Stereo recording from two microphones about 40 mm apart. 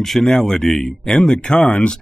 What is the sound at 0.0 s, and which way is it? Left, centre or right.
Speech, centre.